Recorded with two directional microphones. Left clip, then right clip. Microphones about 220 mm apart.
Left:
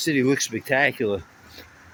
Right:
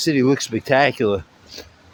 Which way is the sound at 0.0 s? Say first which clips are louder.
Right 3 dB; 15° right (ahead or behind).